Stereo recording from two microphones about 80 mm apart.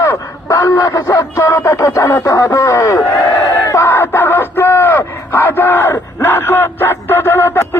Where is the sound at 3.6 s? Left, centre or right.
Left.